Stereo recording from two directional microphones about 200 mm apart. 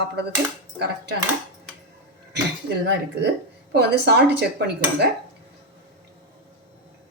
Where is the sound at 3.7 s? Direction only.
55° right (ahead or behind).